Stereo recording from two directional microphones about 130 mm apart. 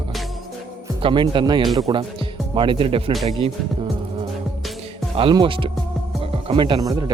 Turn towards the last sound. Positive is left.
turn(degrees=-30)  # may be behind; listen again after turning